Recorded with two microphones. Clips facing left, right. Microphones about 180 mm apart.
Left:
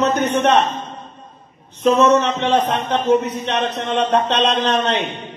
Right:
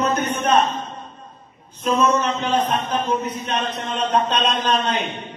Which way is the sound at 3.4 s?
80° left.